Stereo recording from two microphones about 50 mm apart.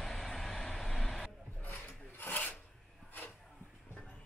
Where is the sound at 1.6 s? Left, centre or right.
Left.